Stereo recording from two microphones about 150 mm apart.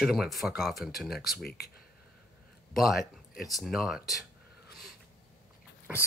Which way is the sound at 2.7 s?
Centre (ahead or behind).